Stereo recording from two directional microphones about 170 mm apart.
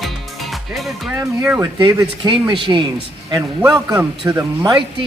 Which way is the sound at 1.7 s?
25° right (ahead or behind).